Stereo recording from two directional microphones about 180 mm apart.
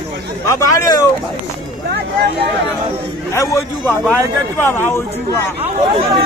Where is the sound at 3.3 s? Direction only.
15° left (ahead or behind).